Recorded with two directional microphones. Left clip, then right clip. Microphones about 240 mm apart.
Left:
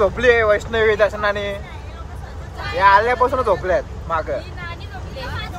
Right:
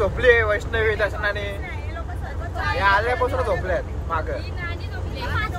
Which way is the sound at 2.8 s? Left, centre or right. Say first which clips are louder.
Left 7 dB; left.